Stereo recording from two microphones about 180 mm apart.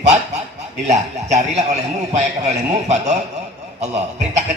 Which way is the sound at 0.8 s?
40° right (ahead or behind).